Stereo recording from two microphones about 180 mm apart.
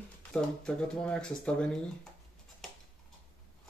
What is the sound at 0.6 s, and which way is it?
Speech, 5° left (ahead or behind).